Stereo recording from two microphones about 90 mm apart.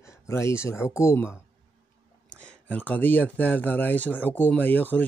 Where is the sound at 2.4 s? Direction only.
15° left (ahead or behind).